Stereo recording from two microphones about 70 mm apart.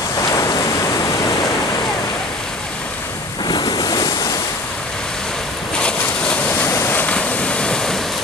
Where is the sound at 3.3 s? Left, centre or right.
Left.